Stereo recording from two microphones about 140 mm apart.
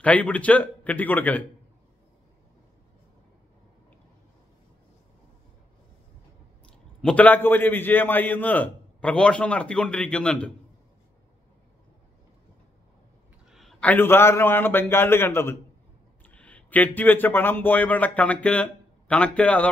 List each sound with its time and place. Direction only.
0.0 s a man's voice: 10° left (ahead or behind)
6.6 s a man's voice: 5° left (ahead or behind)
13.5 s a man's voice: centre (ahead or behind)